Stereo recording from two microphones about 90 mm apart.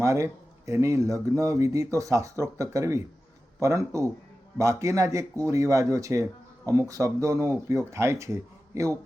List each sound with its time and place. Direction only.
0.0 s speech: 35° right (ahead or behind)